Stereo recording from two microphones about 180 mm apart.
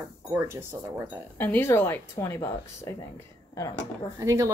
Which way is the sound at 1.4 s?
10° left (ahead or behind).